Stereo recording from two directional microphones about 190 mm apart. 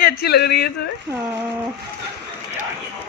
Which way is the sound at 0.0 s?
55° left (ahead or behind).